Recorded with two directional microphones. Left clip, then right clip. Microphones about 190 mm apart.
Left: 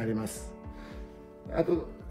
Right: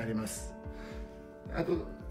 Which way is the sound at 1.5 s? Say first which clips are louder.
Left 5 dB; 50° left (ahead or behind).